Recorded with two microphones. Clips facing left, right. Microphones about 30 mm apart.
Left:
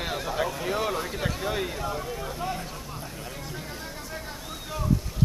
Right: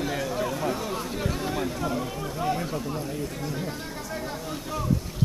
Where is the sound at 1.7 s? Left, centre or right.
Centre.